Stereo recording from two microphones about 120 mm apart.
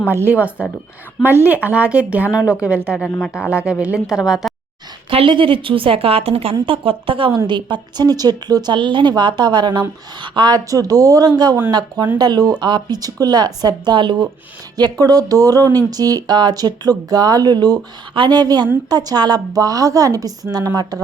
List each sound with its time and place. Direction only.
0.1 s a woman's voice: 15° right (ahead or behind)
5.1 s a woman's voice: 45° right (ahead or behind)